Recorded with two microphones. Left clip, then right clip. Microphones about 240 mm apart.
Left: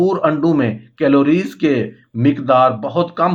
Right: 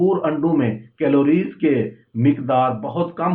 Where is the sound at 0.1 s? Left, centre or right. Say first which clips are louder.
Left 4 dB; left.